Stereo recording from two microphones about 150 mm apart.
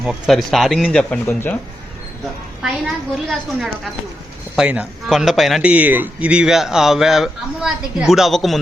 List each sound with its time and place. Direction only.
0.0 s a man's voice: centre (ahead or behind)
2.6 s a man's voice: centre (ahead or behind)